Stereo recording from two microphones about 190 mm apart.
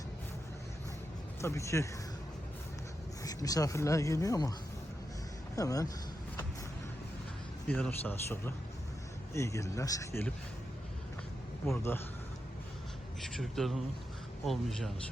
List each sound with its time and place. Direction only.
1.4 s speech: 15° left (ahead or behind)
3.2 s speech: 20° left (ahead or behind)
5.5 s speech: 20° left (ahead or behind)
7.7 s speech: 10° left (ahead or behind)
11.6 s speech: 15° left (ahead or behind)
13.2 s speech: centre (ahead or behind)